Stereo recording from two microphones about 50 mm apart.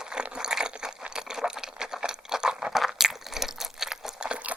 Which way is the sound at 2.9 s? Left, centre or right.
Centre.